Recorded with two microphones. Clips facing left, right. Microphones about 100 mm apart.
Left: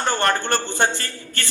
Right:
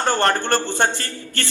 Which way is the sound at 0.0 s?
35° right (ahead or behind).